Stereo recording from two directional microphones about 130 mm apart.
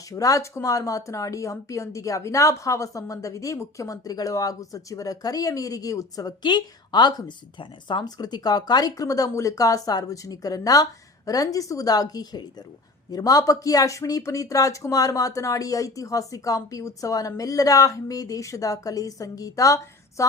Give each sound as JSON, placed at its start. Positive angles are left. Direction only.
{"t": 0.1, "sound": "a woman's voice", "side_deg": 25}